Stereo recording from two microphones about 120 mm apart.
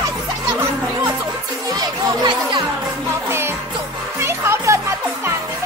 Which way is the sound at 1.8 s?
40° right (ahead or behind).